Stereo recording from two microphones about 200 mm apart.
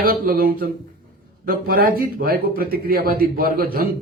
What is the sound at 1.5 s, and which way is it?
A man's voice, 45° right (ahead or behind).